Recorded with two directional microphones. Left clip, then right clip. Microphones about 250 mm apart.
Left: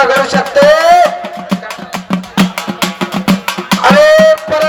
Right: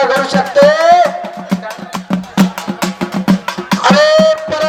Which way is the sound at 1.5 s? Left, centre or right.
Left.